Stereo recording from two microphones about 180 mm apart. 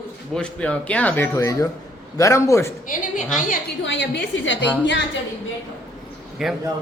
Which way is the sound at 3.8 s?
85° left.